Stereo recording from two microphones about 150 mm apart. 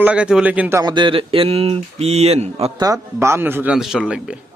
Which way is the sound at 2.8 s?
20° right (ahead or behind).